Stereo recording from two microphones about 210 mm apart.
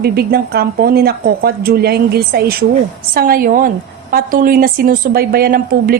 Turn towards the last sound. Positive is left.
turn(degrees=-45)  # may be behind; listen again after turning